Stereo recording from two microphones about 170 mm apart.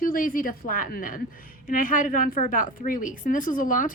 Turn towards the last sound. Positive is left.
turn(degrees=50)  # may be behind; listen again after turning